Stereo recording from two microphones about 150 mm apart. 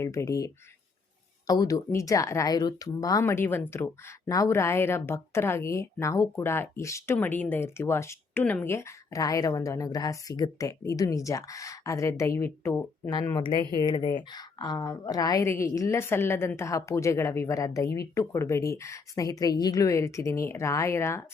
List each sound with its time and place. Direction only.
0.0 s a woman's voice: 20° left (ahead or behind)
13.3 s speech: 30° left (ahead or behind)